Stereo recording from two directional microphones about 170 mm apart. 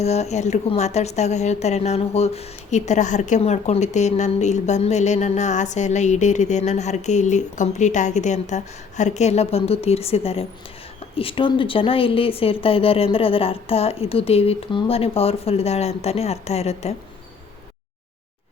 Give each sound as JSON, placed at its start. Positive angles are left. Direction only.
{"t": 0.0, "sound": "a woman's voice", "side_deg": 40}